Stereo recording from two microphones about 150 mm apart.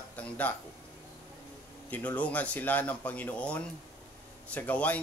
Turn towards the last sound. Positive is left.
turn(degrees=10)  # may be behind; listen again after turning